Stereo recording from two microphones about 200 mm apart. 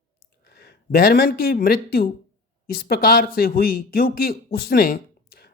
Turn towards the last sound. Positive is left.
turn(degrees=50)  # may be behind; listen again after turning